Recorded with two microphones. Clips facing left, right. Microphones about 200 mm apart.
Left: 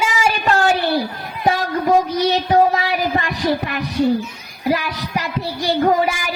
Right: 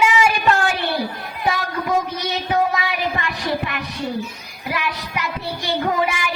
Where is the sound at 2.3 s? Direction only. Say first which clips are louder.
Left 4 dB; 35° left (ahead or behind).